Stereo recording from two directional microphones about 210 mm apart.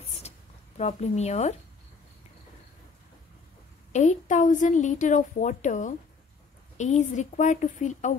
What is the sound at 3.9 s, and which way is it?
A woman's voice, 35° left (ahead or behind).